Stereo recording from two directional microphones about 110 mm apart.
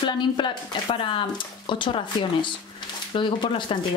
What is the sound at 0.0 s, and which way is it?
Speech, 50° left (ahead or behind).